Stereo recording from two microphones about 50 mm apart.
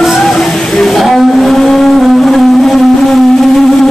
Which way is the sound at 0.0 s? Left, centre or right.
Centre.